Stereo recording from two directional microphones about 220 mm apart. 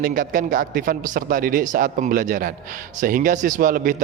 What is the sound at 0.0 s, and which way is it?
A man's voice, 40° right (ahead or behind).